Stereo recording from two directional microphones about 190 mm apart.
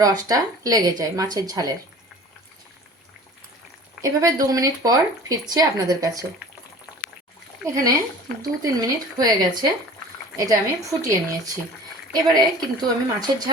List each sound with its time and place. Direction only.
0.0 s speech: 20° right (ahead or behind)
4.0 s speech: 20° right (ahead or behind)
7.6 s a woman's voice: 15° right (ahead or behind)